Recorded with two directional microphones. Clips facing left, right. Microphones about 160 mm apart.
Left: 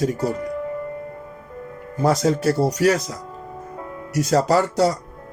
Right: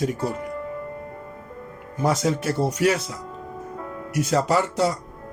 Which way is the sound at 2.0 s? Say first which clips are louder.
Left 4 dB; 40° left (ahead or behind).